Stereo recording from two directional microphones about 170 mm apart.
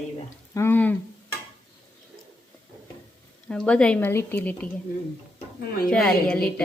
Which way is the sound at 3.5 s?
5° left (ahead or behind).